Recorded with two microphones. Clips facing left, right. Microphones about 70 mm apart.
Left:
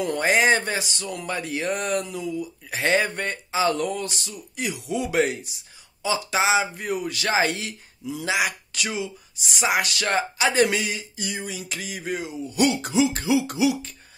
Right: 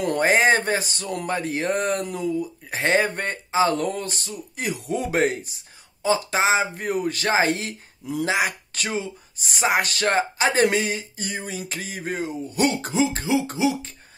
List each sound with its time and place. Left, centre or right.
0.0 s speech: right